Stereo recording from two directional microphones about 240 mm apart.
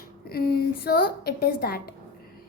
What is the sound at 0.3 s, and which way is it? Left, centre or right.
A woman's voice, left.